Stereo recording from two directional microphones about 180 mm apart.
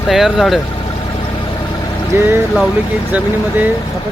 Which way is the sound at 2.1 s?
10° right (ahead or behind).